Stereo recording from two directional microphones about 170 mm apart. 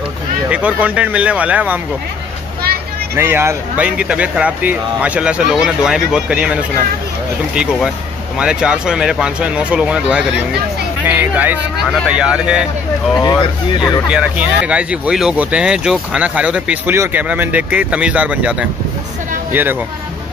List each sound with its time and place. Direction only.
0.5 s speech: 5° right (ahead or behind)
3.2 s speech: 15° right (ahead or behind)
13.2 s speech: 25° left (ahead or behind)
14.0 s speech: 5° right (ahead or behind)